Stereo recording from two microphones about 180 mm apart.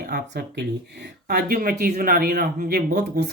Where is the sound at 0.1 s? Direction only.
65° right (ahead or behind).